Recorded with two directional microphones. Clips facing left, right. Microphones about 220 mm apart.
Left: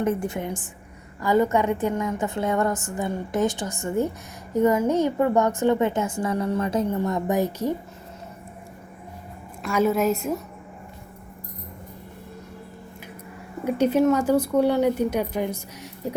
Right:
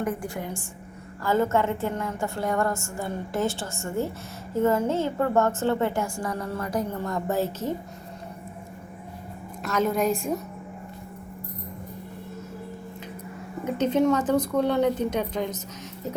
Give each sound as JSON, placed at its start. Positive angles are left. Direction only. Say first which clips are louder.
{"t": 0.0, "sound": "a woman's voice", "louder": "left 5 dB", "side_deg": 25}
{"t": 9.6, "sound": "a woman's voice", "louder": "left 3 dB", "side_deg": 10}
{"t": 13.7, "sound": "a woman's voice", "louder": "left 3 dB", "side_deg": 10}